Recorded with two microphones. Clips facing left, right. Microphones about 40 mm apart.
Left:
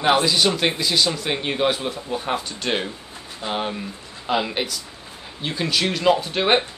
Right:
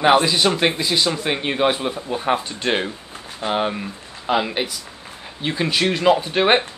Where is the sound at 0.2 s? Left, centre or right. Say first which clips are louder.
Right 2 dB; centre.